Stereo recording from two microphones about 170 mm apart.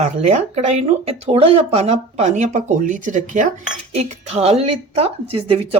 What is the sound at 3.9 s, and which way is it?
Speech, 35° right (ahead or behind).